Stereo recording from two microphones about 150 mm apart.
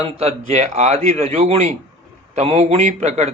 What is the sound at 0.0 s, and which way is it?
A man's voice, 45° right (ahead or behind).